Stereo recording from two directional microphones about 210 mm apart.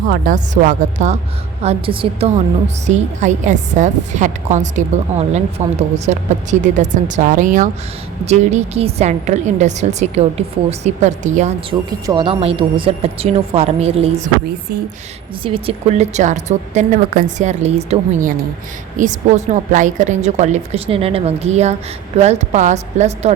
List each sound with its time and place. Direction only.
0.1 s a woman's voice: 40° right (ahead or behind)
11.9 s speech: 20° right (ahead or behind)
15.4 s a woman's voice: 25° right (ahead or behind)